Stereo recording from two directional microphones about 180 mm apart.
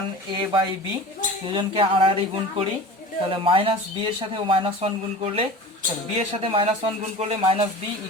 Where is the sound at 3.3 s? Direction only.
30° right (ahead or behind).